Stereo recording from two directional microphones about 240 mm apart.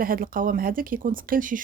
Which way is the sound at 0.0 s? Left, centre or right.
Right.